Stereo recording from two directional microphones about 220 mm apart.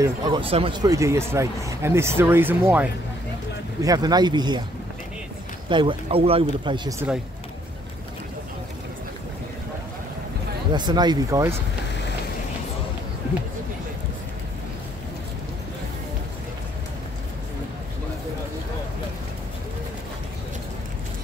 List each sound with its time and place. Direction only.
0.0 s speech: 15° right (ahead or behind)
5.7 s speech: 20° right (ahead or behind)
10.7 s speech: 20° right (ahead or behind)